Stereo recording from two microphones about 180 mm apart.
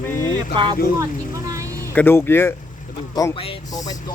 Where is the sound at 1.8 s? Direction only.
10° left (ahead or behind).